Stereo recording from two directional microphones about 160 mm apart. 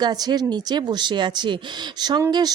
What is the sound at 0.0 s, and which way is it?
Speech, 25° right (ahead or behind).